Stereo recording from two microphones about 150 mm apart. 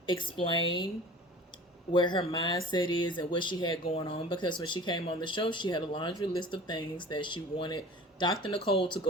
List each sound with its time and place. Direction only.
0.0 s speech: 30° left (ahead or behind)
1.9 s speech: 30° left (ahead or behind)